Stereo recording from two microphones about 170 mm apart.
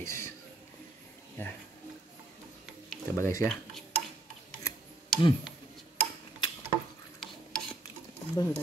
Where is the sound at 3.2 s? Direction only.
15° left (ahead or behind).